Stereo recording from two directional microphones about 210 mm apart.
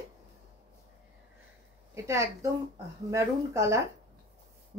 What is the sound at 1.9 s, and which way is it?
A woman's voice, 15° right (ahead or behind).